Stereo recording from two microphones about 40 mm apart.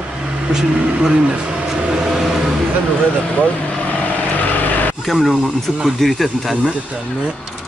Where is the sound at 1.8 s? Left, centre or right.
Right.